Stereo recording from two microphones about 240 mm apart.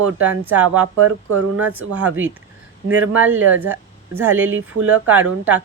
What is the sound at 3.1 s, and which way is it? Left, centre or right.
Speech, centre.